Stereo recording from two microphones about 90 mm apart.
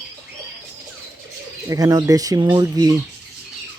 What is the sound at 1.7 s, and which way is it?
Speech, 40° right (ahead or behind).